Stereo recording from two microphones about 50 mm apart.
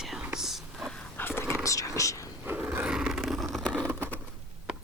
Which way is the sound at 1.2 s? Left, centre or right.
Left.